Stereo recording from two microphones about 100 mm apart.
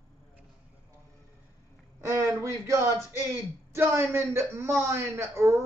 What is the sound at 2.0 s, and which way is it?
Speech, 30° right (ahead or behind).